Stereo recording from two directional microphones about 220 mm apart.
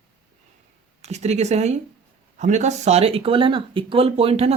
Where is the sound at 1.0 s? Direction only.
30° right (ahead or behind).